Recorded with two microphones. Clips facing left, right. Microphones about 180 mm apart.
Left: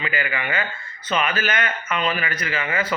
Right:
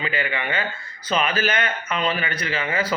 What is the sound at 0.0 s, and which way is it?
Speech, 30° right (ahead or behind).